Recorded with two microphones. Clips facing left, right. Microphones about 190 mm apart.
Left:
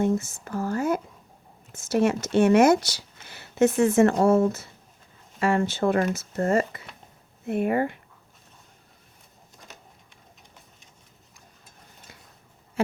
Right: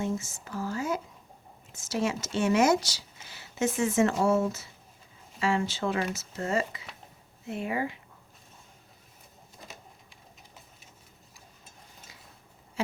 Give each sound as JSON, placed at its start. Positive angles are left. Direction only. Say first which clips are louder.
{"t": 0.0, "sound": "speech", "louder": "left 8 dB", "side_deg": 60}